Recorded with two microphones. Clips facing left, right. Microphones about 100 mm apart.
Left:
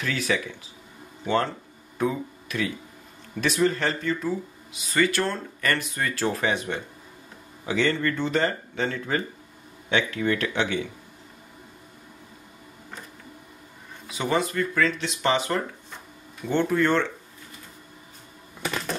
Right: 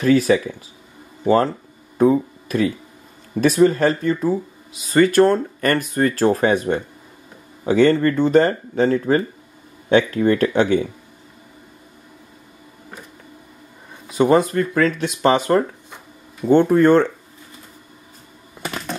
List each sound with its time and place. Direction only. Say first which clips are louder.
0.0 s speech: right 12 dB; 40° right (ahead or behind)
14.1 s speech: right 10 dB; 40° right (ahead or behind)